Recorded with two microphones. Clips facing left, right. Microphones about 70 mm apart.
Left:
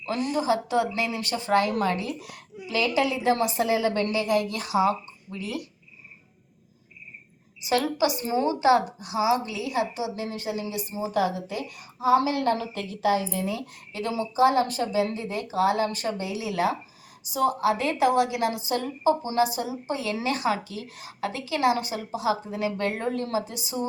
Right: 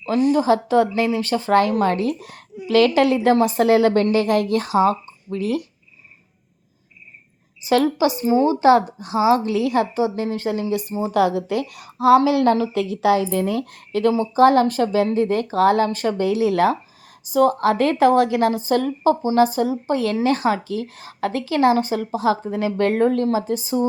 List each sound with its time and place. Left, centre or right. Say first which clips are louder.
0.0 s a woman's voice: right 9 dB; right
2.6 s a woman's voice: right 9 dB; right
4.0 s a woman's voice: right 6 dB; right
7.7 s a woman's voice: right 6 dB; right
8.4 s a woman's voice: right 4 dB; right
9.5 s a woman's voice: right 8 dB; right
11.1 s a woman's voice: right 8 dB; right
13.4 s a woman's voice: right 7 dB; right
19.2 s a woman's voice: right 8 dB; right
23.2 s a woman's voice: right 8 dB; right